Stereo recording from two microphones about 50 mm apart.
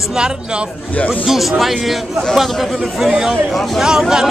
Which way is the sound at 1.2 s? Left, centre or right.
Centre.